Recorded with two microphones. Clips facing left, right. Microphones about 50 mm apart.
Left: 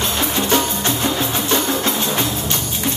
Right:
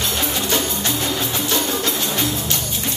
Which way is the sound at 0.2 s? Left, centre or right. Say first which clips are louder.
Left 5 dB; left.